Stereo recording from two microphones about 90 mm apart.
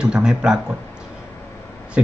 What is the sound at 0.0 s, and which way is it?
Speech, 10° right (ahead or behind).